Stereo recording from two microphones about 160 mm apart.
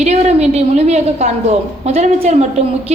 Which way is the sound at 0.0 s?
45° right (ahead or behind).